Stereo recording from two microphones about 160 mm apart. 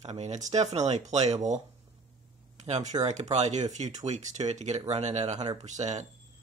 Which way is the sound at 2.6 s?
45° right (ahead or behind).